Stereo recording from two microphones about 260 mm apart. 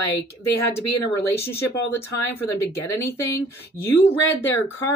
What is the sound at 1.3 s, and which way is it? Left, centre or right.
Speech, centre.